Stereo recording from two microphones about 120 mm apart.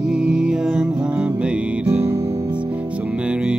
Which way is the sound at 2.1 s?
30° right (ahead or behind).